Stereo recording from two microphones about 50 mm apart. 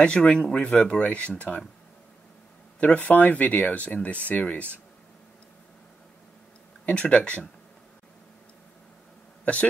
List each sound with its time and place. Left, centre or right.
0.0 s speech: left
2.8 s speech: left
7.0 s speech: left
9.4 s speech: left